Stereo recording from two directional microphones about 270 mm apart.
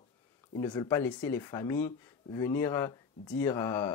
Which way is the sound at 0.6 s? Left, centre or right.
Centre.